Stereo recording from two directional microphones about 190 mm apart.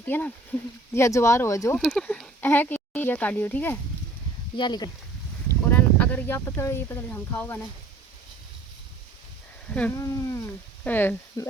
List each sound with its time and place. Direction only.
0.0 s speech: 10° left (ahead or behind)
1.8 s speech: 5° left (ahead or behind)
4.5 s speech: 25° left (ahead or behind)
5.5 s speech: 10° left (ahead or behind)
9.7 s speech: 10° left (ahead or behind)